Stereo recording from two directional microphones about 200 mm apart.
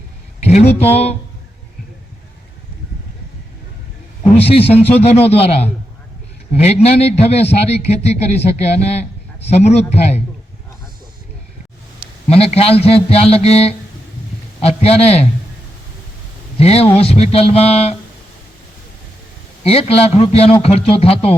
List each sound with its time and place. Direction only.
0.4 s speech: 30° left (ahead or behind)
4.4 s a man's voice: 30° left (ahead or behind)
6.5 s speech: 30° left (ahead or behind)
12.3 s a man's voice: 30° left (ahead or behind)
16.6 s speech: 30° left (ahead or behind)
19.6 s a man's voice: 30° left (ahead or behind)